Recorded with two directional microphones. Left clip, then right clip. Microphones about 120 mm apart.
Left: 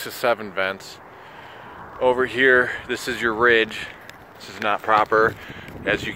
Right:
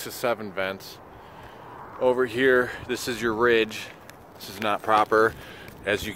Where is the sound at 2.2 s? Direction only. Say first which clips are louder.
Left 5 dB; 35° right (ahead or behind).